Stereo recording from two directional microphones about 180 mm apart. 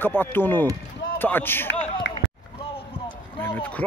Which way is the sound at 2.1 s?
85° left.